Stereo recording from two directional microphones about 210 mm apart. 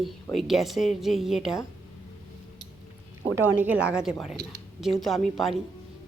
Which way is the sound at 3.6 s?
5° right (ahead or behind).